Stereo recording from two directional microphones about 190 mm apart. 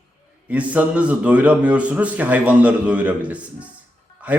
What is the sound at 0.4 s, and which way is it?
Speech, 5° right (ahead or behind).